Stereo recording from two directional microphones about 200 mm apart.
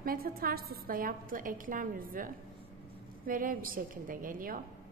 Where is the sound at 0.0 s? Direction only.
45° right (ahead or behind).